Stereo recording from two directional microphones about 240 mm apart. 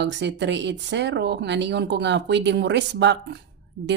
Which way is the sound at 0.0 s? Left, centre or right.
Right.